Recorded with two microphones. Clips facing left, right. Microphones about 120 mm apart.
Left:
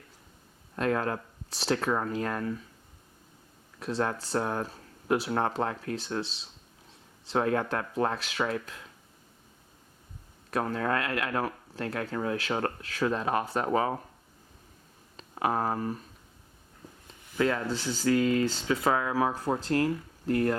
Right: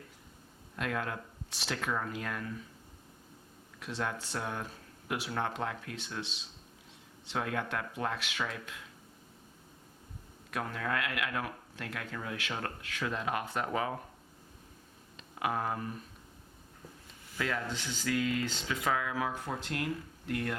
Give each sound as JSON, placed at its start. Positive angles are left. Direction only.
{"t": 0.8, "sound": "speech", "side_deg": 35}
{"t": 3.8, "sound": "speech", "side_deg": 35}
{"t": 10.5, "sound": "speech", "side_deg": 35}
{"t": 15.1, "sound": "speech", "side_deg": 35}
{"t": 17.3, "sound": "speech", "side_deg": 35}